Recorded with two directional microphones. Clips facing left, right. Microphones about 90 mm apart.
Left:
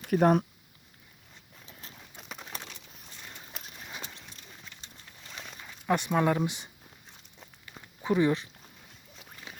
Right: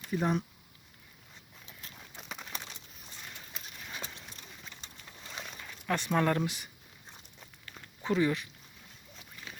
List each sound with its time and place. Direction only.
0.0 s speech: 55° left (ahead or behind)
1.8 s clip-clop: 25° left (ahead or behind)
5.6 s speech: 15° left (ahead or behind)
6.4 s speech: 20° left (ahead or behind)
7.3 s walk: 15° left (ahead or behind)
9.5 s boat: 20° left (ahead or behind)